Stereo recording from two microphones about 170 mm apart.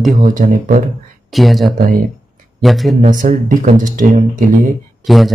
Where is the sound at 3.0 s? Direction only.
55° right (ahead or behind).